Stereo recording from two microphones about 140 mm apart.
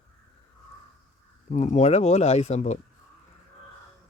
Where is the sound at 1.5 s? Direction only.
55° left (ahead or behind).